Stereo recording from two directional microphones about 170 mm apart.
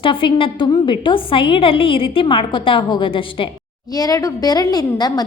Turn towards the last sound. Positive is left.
turn(degrees=25)  # may be behind; listen again after turning